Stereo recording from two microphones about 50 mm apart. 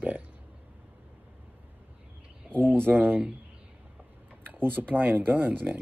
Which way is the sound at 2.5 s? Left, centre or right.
Right.